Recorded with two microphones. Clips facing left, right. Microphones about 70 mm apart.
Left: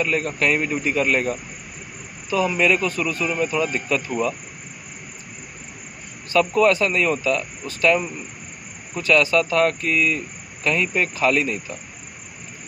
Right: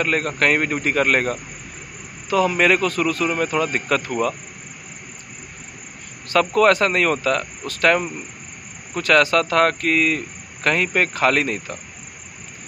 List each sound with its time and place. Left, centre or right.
0.0 s speech: right
6.3 s speech: right